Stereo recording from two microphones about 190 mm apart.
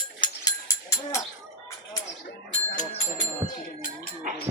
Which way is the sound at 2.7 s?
40° left (ahead or behind).